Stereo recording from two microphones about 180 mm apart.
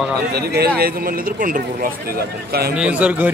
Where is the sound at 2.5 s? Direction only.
60° right (ahead or behind).